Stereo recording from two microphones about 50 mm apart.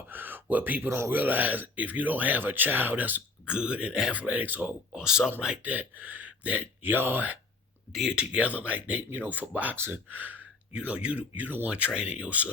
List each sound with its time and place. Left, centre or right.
0.1 s a sound: right
0.4 s speech: right
0.9 s speech: right
1.1 s speech: right
3.4 s speech: centre; by 4.7 s right
4.9 s speech: centre
5.6 s speech: right
6.8 s speech: right
8.1 s speech: right
10.7 s speech: right